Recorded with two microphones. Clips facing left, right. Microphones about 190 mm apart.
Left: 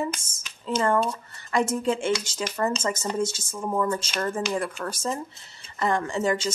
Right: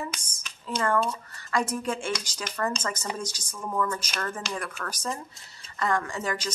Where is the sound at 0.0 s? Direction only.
25° left (ahead or behind).